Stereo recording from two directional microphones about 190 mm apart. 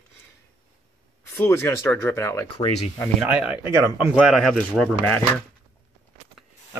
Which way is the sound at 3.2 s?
5° right (ahead or behind).